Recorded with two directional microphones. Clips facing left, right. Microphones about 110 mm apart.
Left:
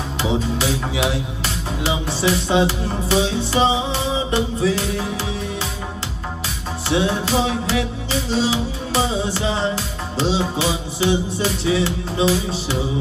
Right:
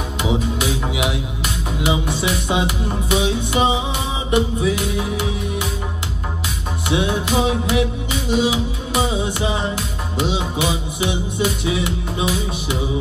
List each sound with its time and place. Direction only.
0.9 s speech: 15° right (ahead or behind)
6.9 s speech: 15° right (ahead or behind)